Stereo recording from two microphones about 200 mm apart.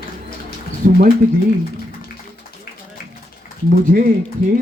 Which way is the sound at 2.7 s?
50° left (ahead or behind).